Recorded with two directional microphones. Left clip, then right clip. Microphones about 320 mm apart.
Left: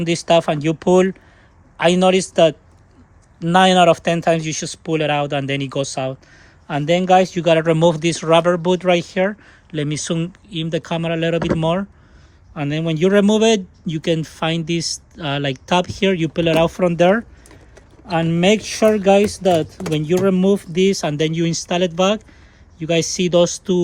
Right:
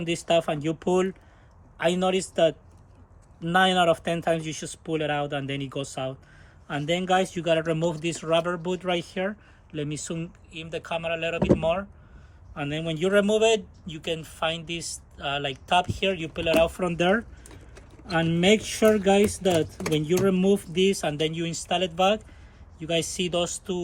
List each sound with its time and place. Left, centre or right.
0.0 s a man's voice: left